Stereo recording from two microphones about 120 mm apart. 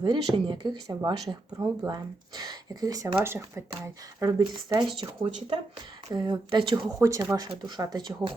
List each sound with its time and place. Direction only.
0.0 s speech: 45° right (ahead or behind); by 4.3 s 20° right (ahead or behind)
4.3 s speech: 35° right (ahead or behind)
7.0 s speech: 25° right (ahead or behind)